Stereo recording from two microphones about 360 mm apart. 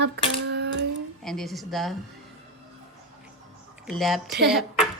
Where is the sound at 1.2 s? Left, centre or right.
Centre.